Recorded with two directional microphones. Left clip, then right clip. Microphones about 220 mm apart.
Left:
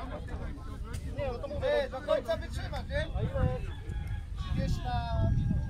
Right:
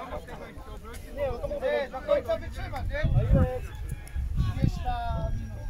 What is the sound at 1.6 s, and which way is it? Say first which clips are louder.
Speech: even; 50° left (ahead or behind).